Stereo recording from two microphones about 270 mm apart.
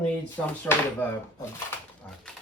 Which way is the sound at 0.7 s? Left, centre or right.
Centre.